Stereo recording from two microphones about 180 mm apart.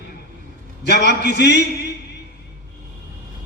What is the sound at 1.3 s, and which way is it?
Speech, 70° left (ahead or behind).